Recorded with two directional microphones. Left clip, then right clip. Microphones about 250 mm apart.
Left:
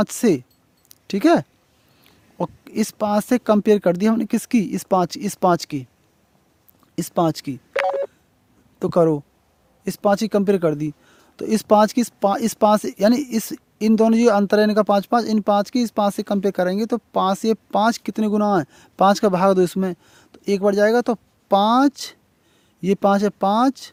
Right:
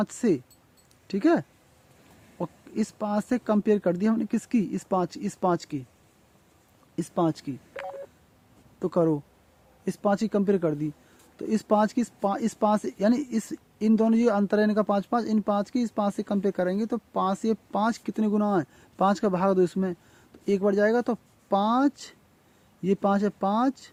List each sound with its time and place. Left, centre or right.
0.0 s speech: left
6.9 s telephone dialing: left
8.8 s speech: left